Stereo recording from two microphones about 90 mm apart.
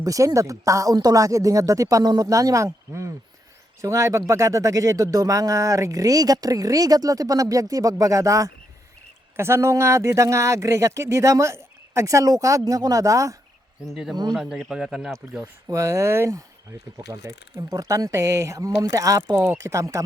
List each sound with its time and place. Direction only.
0.0 s speech: 40° right (ahead or behind)
13.8 s speech: 5° right (ahead or behind)
15.6 s speech: 35° right (ahead or behind)